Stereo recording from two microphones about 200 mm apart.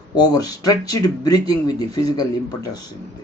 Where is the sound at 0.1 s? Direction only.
20° left (ahead or behind).